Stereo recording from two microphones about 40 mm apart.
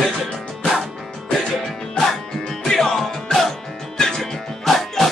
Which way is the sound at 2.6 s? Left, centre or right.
Centre.